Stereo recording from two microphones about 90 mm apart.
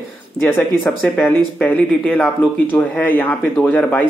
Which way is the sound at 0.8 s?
20° left (ahead or behind).